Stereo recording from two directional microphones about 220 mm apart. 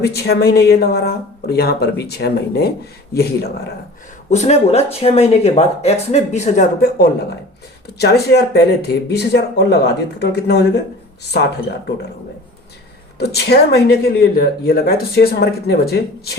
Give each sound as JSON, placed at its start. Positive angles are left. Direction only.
{"t": 0.0, "sound": "speech", "side_deg": 45}
{"t": 4.3, "sound": "speech", "side_deg": 30}
{"t": 13.1, "sound": "speech", "side_deg": 45}